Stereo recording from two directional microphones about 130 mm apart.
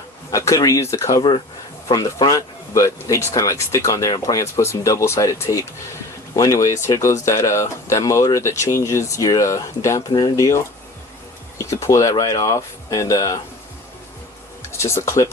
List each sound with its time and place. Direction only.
0.3 s speech: 25° left (ahead or behind)
11.6 s speech: 25° left (ahead or behind)
14.7 s speech: 20° left (ahead or behind)